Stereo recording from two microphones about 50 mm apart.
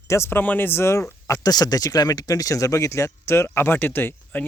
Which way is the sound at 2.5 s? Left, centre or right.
Left.